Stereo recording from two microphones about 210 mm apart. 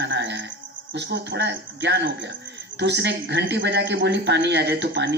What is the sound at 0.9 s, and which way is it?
Speech, 55° right (ahead or behind).